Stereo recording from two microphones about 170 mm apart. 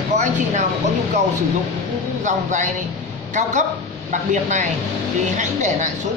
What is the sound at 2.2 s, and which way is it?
Speech, 45° right (ahead or behind).